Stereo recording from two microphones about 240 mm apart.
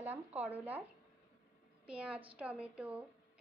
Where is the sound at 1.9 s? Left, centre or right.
Centre.